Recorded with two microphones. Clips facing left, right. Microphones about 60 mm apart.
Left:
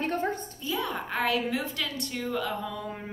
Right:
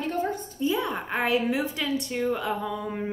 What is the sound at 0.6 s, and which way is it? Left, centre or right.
A woman's voice, right.